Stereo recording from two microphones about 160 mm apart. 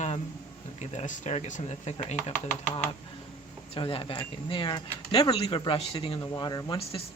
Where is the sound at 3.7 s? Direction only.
35° left (ahead or behind).